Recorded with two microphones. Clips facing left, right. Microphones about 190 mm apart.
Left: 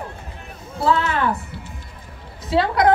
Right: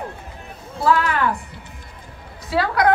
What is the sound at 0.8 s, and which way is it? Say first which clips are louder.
A woman's voice: right 1 dB; 25° left (ahead or behind).